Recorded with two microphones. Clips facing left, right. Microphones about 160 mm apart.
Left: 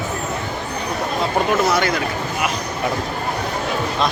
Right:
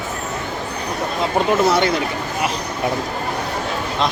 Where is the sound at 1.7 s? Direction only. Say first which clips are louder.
Right 2 dB; 30° right (ahead or behind).